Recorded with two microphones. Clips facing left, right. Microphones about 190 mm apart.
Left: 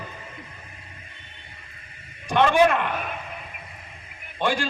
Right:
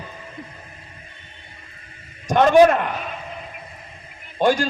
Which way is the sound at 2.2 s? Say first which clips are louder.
Right 5 dB; 45° right (ahead or behind).